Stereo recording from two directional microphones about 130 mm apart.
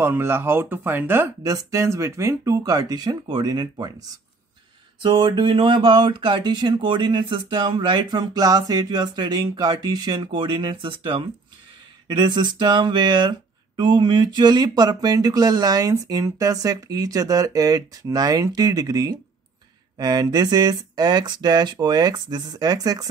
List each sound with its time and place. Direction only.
0.0 s speech: 20° right (ahead or behind)
5.0 s speech: 35° right (ahead or behind)